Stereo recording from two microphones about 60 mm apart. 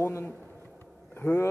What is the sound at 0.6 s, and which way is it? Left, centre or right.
Vehicle, left.